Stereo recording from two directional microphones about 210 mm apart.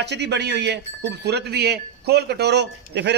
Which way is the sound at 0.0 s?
55° right (ahead or behind).